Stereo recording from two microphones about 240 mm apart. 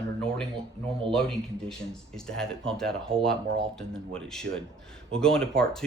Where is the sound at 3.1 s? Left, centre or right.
Right.